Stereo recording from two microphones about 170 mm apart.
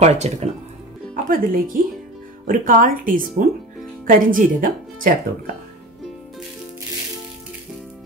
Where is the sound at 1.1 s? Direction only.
55° right (ahead or behind).